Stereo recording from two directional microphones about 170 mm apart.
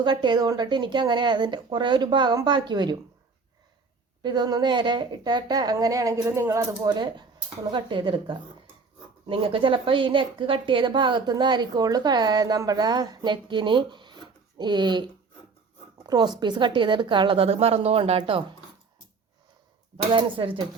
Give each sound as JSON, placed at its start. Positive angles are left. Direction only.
{"t": 0.0, "sound": "a woman's voice", "side_deg": -25}
{"t": 4.2, "sound": "a woman's voice", "side_deg": -25}
{"t": 20.1, "sound": "a woman's voice", "side_deg": -30}